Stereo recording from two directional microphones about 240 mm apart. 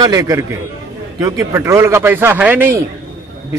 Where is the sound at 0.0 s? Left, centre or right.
Centre.